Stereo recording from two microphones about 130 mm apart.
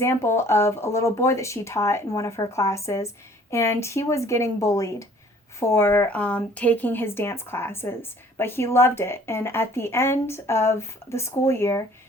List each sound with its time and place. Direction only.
0.0 s speech: 20° left (ahead or behind)